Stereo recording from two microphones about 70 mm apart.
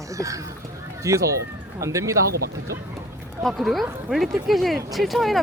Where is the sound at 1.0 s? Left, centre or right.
Right.